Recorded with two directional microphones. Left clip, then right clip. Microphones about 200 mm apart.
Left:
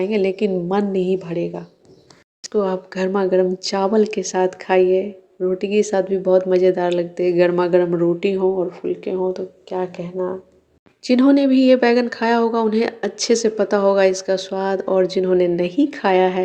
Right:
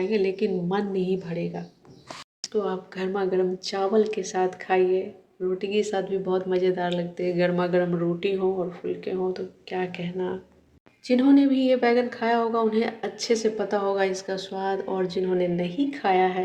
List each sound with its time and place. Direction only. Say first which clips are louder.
0.0 s a woman's voice: left 5 dB; 40° left (ahead or behind); by 10.3 s 25° left (ahead or behind)
11.0 s speech: left 5 dB; 50° left (ahead or behind)